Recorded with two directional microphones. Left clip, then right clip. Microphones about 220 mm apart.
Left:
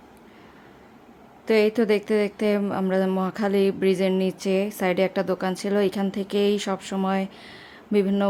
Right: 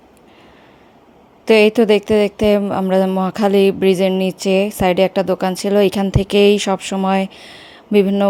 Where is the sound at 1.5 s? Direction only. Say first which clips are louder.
Right 9 dB; 25° right (ahead or behind).